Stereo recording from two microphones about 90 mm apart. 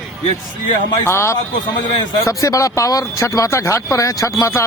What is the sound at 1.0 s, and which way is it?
A man's voice, 30° left (ahead or behind).